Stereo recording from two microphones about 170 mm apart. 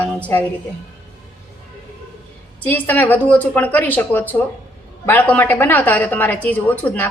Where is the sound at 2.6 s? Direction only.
10° left (ahead or behind).